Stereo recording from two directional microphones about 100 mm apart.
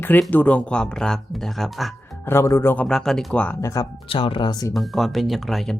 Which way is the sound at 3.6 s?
35° left (ahead or behind).